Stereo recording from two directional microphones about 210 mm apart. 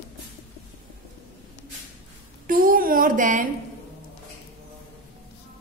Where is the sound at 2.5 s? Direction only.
40° right (ahead or behind).